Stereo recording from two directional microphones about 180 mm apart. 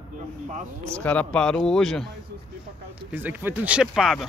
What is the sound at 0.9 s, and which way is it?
A man's voice, 5° left (ahead or behind).